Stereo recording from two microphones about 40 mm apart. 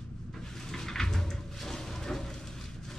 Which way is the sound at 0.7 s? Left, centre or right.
Centre.